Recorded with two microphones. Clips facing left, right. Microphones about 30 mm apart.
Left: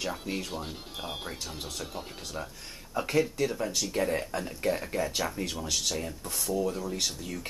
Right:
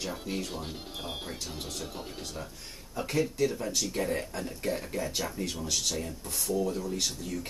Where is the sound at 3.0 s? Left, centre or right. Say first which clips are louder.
Left 1 dB; centre.